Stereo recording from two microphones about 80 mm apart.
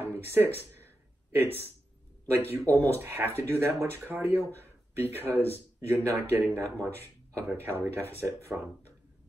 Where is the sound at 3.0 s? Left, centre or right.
Right.